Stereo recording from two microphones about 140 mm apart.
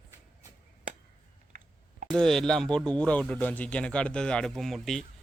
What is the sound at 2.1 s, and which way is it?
Speech, 5° left (ahead or behind).